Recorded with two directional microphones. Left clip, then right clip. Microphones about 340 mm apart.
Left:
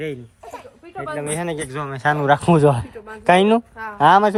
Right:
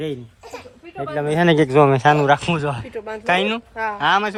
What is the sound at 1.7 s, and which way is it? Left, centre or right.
Speech, centre.